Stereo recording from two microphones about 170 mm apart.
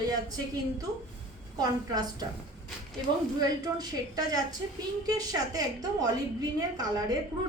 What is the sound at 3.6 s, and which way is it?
A woman's voice, 20° right (ahead or behind).